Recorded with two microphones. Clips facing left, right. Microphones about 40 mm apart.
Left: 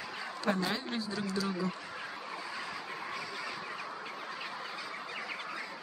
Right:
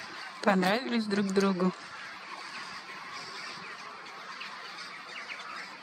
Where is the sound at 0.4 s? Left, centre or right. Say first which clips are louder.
Right 7 dB; right.